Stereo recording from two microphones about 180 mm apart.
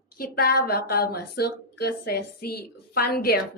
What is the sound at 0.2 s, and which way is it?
A woman's voice, 60° left (ahead or behind).